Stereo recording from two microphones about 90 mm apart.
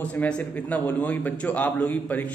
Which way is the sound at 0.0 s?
15° left (ahead or behind).